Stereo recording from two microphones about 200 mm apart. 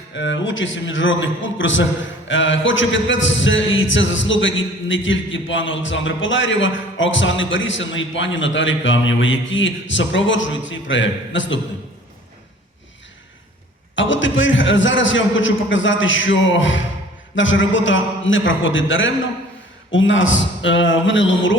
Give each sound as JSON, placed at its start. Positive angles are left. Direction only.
{"t": 0.1, "sound": "a man's voice", "side_deg": 65}
{"t": 13.9, "sound": "a man's voice", "side_deg": 70}